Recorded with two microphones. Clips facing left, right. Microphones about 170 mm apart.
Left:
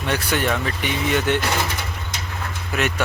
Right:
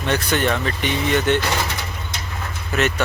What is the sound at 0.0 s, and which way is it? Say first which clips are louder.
Speech: right 2 dB; 10° left (ahead or behind).